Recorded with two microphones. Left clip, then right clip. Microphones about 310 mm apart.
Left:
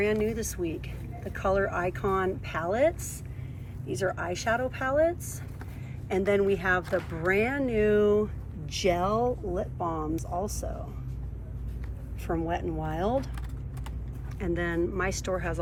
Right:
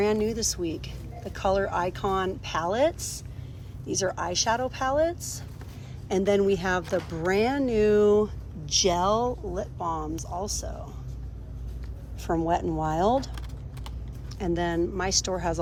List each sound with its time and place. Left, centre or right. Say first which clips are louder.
0.0 s speech: right 2 dB; centre
12.4 s speech: right 6 dB; right
14.3 s speech: right 3 dB; centre